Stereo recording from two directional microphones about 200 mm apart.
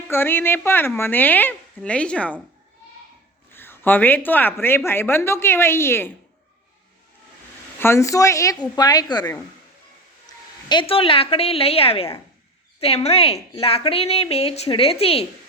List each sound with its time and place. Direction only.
0.1 s speech: 10° left (ahead or behind)
3.5 s speech: 10° left (ahead or behind)
7.8 s a woman's voice: 15° left (ahead or behind); by 15.3 s 30° left (ahead or behind)